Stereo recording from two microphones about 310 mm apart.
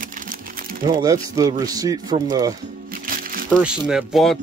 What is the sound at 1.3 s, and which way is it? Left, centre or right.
Speech, centre.